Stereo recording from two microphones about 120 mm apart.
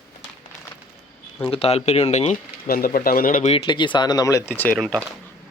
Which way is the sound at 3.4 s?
55° left (ahead or behind).